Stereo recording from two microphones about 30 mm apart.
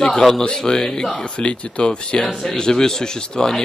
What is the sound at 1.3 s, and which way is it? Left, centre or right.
Speech, left.